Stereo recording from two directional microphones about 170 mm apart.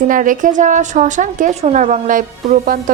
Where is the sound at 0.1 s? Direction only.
50° right (ahead or behind).